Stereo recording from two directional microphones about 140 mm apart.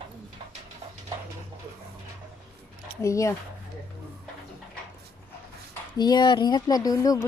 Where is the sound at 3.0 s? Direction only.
20° left (ahead or behind).